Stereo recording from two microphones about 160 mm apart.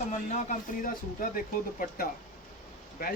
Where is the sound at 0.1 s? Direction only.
50° left (ahead or behind).